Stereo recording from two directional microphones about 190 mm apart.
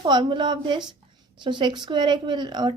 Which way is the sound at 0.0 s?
25° right (ahead or behind).